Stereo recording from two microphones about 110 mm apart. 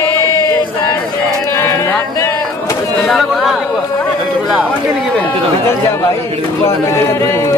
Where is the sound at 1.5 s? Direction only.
25° left (ahead or behind).